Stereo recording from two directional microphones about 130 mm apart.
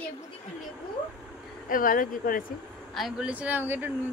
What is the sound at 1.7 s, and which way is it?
Speech, 90° left.